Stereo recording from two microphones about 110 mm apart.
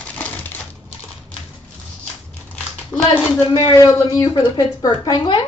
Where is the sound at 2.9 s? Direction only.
Centre (ahead or behind).